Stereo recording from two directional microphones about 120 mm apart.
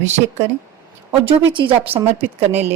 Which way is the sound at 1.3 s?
45° right (ahead or behind).